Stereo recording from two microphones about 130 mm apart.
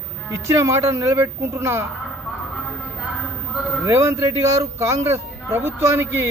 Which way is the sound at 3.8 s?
20° right (ahead or behind).